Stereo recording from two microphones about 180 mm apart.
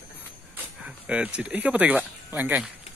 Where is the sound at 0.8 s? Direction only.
5° right (ahead or behind).